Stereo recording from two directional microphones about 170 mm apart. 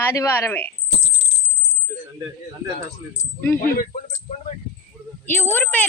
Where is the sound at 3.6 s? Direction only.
45° left (ahead or behind).